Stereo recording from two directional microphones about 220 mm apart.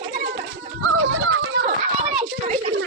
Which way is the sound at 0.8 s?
65° right (ahead or behind).